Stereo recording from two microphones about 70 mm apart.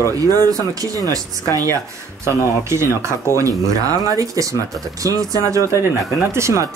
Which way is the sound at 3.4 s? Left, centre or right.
Right.